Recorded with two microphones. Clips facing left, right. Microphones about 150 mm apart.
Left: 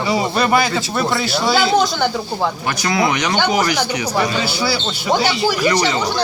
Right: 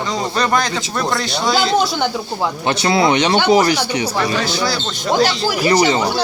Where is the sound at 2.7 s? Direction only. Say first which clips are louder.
Right 6 dB; 30° right (ahead or behind).